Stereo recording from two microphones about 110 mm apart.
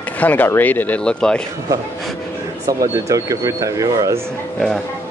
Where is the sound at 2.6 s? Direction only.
30° right (ahead or behind).